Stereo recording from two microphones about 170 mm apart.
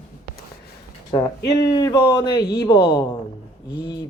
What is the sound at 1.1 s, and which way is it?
Speech, 20° left (ahead or behind).